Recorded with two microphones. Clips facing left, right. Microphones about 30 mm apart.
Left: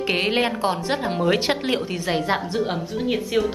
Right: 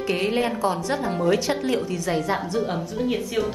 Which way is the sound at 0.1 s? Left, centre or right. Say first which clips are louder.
Left 2 dB; left.